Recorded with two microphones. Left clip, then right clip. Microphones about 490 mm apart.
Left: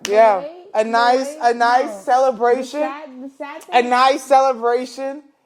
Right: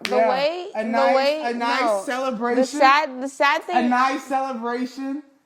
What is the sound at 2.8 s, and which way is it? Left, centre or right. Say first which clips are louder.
Speech: right 6 dB; left.